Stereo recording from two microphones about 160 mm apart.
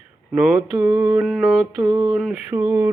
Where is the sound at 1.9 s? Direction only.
10° right (ahead or behind).